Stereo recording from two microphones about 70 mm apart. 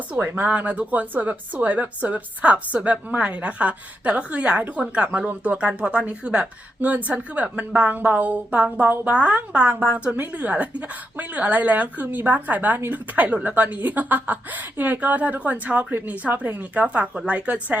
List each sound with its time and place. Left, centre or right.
0.1 s a woman's voice: right